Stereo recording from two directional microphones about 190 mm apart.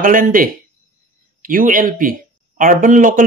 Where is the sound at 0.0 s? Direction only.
45° right (ahead or behind).